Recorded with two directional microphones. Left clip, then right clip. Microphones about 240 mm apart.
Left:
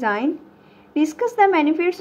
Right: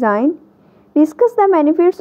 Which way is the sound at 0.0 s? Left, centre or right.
Right.